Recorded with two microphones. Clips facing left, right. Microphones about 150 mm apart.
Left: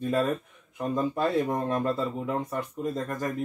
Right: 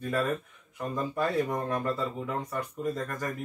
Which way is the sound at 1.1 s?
25° left (ahead or behind).